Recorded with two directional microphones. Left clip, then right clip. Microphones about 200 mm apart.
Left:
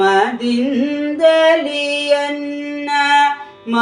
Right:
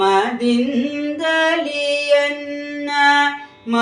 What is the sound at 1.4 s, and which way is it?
Female singing, 15° left (ahead or behind).